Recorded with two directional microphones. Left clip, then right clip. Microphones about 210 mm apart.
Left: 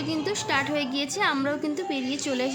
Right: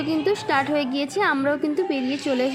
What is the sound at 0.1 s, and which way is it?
A woman's voice, 10° right (ahead or behind).